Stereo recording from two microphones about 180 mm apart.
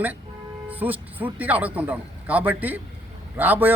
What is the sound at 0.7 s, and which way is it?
Speech, 10° right (ahead or behind).